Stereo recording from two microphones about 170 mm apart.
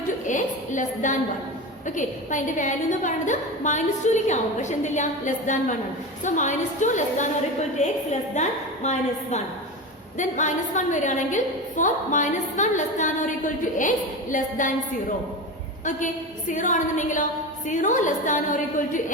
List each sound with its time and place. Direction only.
0.3 s a woman's voice: 50° left (ahead or behind)
16.5 s a woman's voice: 45° left (ahead or behind)